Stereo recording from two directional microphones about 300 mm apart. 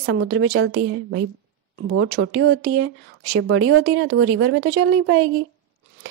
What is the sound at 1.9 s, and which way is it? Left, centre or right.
A woman's voice, right.